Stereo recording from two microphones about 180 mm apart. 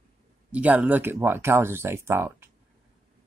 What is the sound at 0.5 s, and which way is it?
Speech, 10° right (ahead or behind).